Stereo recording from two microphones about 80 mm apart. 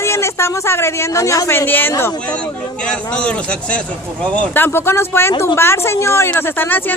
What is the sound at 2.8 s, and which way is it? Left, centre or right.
Speech, centre.